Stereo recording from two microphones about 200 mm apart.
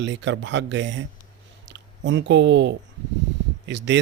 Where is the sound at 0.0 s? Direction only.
60° right (ahead or behind).